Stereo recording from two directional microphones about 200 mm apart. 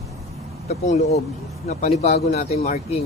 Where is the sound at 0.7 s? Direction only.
35° left (ahead or behind).